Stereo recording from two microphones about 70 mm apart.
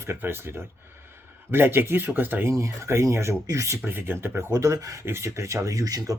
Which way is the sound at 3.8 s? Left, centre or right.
Right.